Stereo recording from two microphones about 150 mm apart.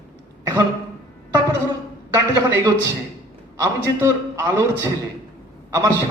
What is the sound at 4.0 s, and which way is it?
Speech, 20° right (ahead or behind).